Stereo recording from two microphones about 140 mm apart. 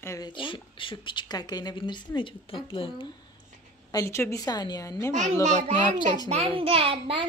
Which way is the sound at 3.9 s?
20° left (ahead or behind).